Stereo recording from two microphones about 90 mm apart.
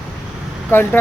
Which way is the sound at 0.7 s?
25° left (ahead or behind).